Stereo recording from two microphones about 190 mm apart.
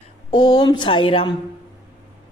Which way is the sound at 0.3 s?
25° left (ahead or behind).